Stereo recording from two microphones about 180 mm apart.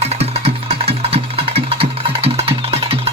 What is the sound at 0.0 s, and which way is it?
Music, 35° right (ahead or behind).